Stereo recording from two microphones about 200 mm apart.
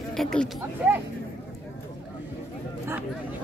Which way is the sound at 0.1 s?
5° left (ahead or behind).